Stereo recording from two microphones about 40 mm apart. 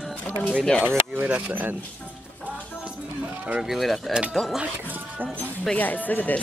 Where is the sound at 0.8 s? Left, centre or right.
Right.